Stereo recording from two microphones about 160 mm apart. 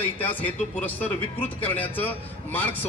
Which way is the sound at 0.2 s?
10° left (ahead or behind).